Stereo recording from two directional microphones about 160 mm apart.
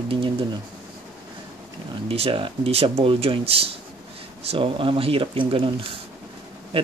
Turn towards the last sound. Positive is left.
turn(degrees=-35)  # may be behind; listen again after turning